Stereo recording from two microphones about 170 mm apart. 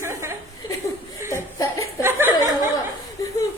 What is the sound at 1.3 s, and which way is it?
Laughter, 20° left (ahead or behind).